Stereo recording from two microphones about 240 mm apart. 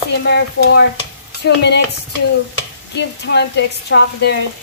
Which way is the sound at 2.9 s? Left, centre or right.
Left.